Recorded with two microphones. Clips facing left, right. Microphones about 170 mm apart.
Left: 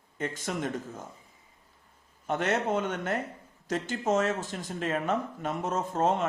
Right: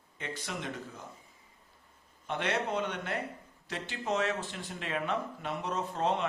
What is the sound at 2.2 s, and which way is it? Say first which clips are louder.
Speech: left 5 dB; 45° left (ahead or behind).